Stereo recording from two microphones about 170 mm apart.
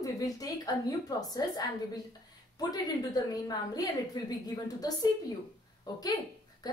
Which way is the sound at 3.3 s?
25° left (ahead or behind).